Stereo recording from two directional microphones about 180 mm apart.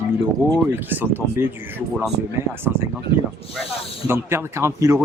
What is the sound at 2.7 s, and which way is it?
Speech, 5° right (ahead or behind).